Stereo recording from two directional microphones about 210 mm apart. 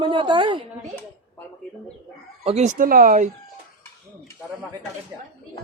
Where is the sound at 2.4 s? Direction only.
30° right (ahead or behind).